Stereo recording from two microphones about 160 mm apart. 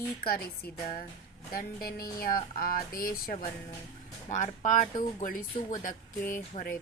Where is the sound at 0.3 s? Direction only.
70° left (ahead or behind).